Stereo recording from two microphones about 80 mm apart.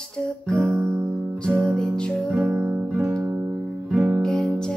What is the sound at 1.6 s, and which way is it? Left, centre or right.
Music, centre.